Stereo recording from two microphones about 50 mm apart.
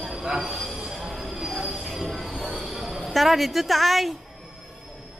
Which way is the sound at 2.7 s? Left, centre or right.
Centre.